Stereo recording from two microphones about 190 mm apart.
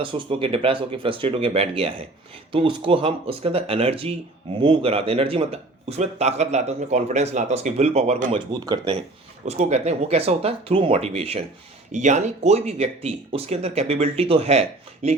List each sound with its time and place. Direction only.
0.0 s speech: 30° right (ahead or behind)
8.6 s speech: 25° right (ahead or behind)
9.5 s speech: 35° right (ahead or behind)